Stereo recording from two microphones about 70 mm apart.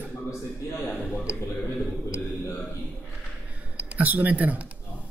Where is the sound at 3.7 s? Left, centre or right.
Right.